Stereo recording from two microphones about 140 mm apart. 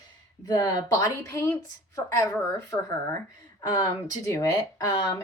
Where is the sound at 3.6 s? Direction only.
25° left (ahead or behind).